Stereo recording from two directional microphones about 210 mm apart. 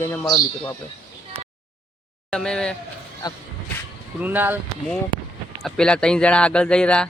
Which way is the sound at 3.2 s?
20° left (ahead or behind).